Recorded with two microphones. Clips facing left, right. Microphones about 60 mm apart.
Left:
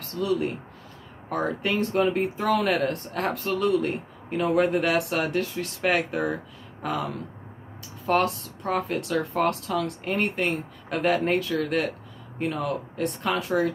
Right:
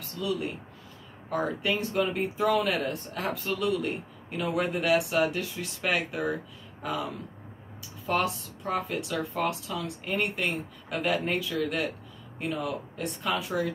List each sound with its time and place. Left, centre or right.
0.2 s speech: left
8.1 s speech: left
10.0 s speech: left